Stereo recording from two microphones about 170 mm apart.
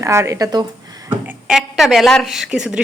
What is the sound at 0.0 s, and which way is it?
Speech, 15° right (ahead or behind).